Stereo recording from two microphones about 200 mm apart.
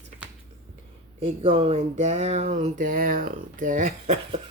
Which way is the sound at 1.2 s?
30° right (ahead or behind).